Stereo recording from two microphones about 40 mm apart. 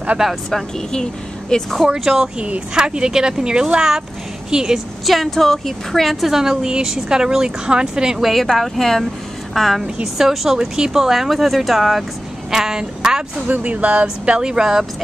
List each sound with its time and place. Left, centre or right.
0.5 s a woman's voice: centre
2.0 s speech: centre
5.0 s a woman's voice: centre
6.2 s speech: centre
8.2 s a woman's voice: centre
10.1 s a woman's voice: centre
13.5 s speech: right
14.2 s speech: right